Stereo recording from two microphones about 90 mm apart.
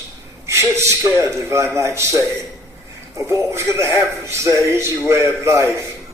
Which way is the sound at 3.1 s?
35° right (ahead or behind).